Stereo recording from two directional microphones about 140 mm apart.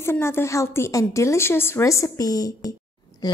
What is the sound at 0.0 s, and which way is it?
A woman's voice, 15° left (ahead or behind).